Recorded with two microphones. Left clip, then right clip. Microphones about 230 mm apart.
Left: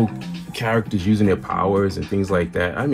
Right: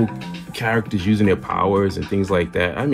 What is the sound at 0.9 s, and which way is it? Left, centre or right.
Speech, right.